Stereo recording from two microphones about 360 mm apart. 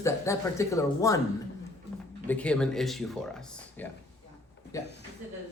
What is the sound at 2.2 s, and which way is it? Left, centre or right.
Speech, centre.